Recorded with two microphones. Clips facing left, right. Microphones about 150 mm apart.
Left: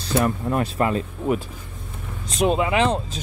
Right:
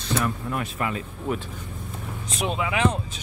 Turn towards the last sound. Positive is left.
turn(degrees=30)  # may be behind; listen again after turning